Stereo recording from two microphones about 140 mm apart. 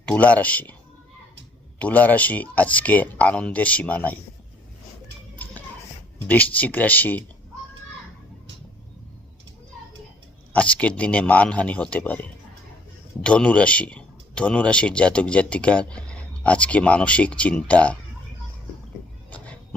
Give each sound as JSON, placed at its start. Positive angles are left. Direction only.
{"t": 0.0, "sound": "speech", "side_deg": 10}
{"t": 1.8, "sound": "speech", "side_deg": 10}
{"t": 6.2, "sound": "speech", "side_deg": 10}
{"t": 10.5, "sound": "speech", "side_deg": 10}
{"t": 13.2, "sound": "speech", "side_deg": 10}